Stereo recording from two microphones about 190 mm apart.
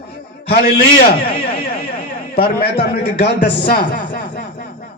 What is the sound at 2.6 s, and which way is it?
A man's voice, 55° left (ahead or behind).